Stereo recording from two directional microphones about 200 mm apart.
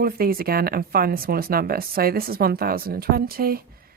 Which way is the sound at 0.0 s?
50° right (ahead or behind).